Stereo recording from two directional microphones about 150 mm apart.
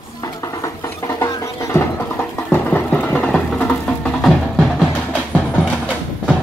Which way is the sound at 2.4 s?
10° left (ahead or behind).